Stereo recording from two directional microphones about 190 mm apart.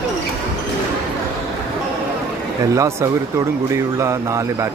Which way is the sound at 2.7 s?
15° right (ahead or behind).